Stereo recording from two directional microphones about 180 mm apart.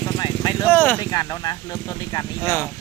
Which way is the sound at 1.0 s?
20° left (ahead or behind).